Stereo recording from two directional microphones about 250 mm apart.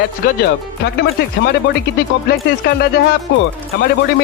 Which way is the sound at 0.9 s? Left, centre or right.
Left.